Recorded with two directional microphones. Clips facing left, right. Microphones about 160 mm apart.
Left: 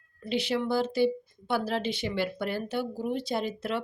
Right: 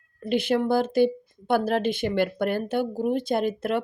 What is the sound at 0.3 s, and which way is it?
Speech, 50° right (ahead or behind).